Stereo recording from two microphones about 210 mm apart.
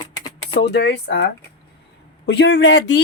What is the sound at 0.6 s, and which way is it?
Speech, 55° left (ahead or behind).